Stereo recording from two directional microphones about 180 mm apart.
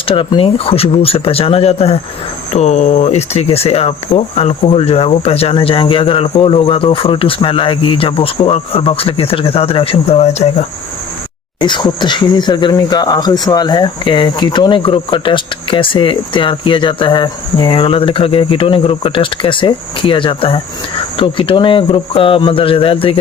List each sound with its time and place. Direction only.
0.0 s speech: 30° left (ahead or behind)
11.6 s speech: 25° left (ahead or behind)